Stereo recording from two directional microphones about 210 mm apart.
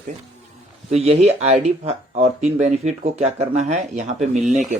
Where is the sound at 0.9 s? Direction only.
30° right (ahead or behind).